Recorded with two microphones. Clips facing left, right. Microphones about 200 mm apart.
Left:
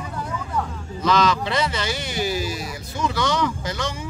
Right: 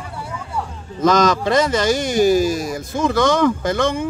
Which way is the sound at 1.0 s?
45° right (ahead or behind).